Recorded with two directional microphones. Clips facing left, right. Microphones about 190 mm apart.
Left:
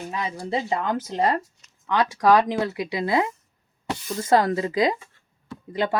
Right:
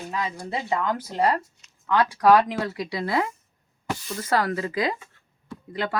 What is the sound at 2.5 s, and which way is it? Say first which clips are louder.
Speech: left 3 dB; 20° left (ahead or behind).